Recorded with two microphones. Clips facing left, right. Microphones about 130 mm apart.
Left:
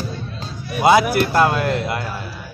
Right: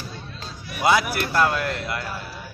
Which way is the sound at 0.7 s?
25° left (ahead or behind).